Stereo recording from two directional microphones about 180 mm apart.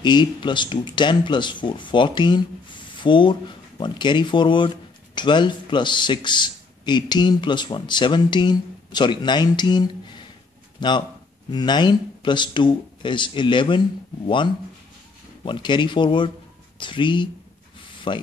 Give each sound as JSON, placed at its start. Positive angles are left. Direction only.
{"t": 0.0, "sound": "speech", "side_deg": 25}